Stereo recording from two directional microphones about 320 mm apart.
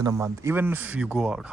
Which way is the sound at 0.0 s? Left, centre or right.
Centre.